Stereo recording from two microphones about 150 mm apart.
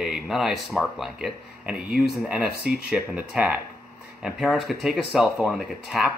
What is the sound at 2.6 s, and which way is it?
Speech, 90° right.